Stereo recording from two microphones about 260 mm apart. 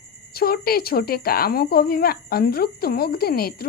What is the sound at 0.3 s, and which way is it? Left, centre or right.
Speech, left.